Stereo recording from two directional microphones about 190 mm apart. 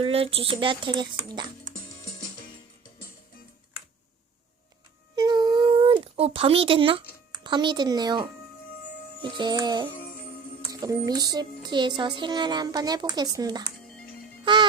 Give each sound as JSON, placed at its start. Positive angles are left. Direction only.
{"t": 0.0, "sound": "music", "side_deg": -30}
{"t": 5.1, "sound": "a sound", "side_deg": -20}
{"t": 7.4, "sound": "music", "side_deg": -25}
{"t": 13.8, "sound": "music", "side_deg": 5}
{"t": 14.4, "sound": "music", "side_deg": -25}